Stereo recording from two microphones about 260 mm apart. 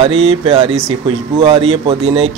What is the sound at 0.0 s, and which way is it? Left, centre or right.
Speech, right.